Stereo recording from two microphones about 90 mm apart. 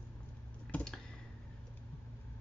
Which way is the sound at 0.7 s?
20° left (ahead or behind).